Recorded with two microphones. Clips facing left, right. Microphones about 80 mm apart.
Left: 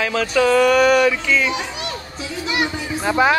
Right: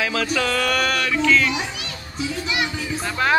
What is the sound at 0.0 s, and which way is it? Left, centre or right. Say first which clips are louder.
Speech: left 5 dB; centre.